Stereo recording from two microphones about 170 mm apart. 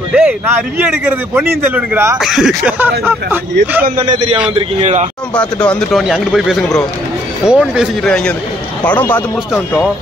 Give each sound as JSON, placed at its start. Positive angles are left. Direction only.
{"t": 0.1, "sound": "a man's voice", "side_deg": -5}
{"t": 2.1, "sound": "a man's voice", "side_deg": 0}
{"t": 3.8, "sound": "a man's voice", "side_deg": -45}
{"t": 5.3, "sound": "a man's voice", "side_deg": 5}